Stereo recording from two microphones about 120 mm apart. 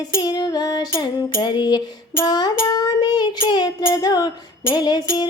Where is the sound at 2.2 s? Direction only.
35° left (ahead or behind).